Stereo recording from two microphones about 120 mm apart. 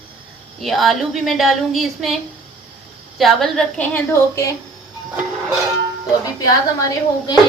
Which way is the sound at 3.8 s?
15° left (ahead or behind).